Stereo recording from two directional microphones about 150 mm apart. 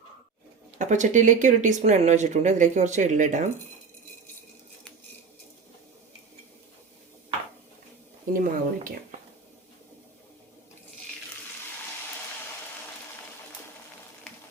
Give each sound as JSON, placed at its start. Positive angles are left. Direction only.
{"t": 0.8, "sound": "speech", "side_deg": -55}
{"t": 8.3, "sound": "a woman's voice", "side_deg": -65}